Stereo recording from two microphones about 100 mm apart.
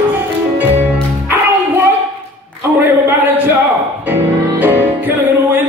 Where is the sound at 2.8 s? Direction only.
20° right (ahead or behind).